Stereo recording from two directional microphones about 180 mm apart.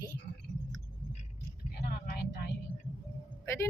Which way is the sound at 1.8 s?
60° left (ahead or behind).